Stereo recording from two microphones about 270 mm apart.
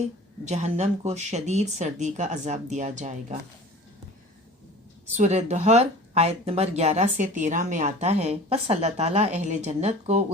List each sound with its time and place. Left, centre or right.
0.0 s speech: right
5.1 s speech: right